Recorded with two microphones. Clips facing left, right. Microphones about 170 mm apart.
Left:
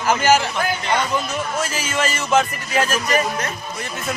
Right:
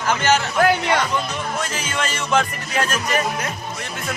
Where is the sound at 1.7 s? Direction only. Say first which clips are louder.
Left 2 dB; 5° left (ahead or behind).